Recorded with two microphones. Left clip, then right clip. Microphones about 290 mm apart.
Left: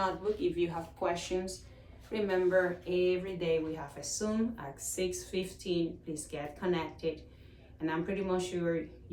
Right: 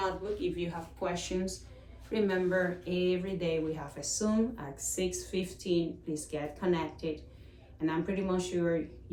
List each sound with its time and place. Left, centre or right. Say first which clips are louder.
0.5 s speech: left 4 dB; centre